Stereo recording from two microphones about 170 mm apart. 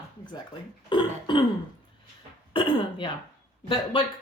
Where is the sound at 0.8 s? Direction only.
25° left (ahead or behind).